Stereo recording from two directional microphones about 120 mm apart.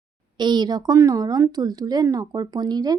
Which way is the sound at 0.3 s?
40° right (ahead or behind).